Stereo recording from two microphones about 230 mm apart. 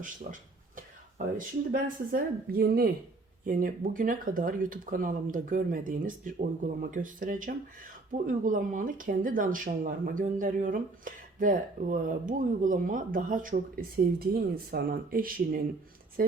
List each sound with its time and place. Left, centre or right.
0.3 s speech: right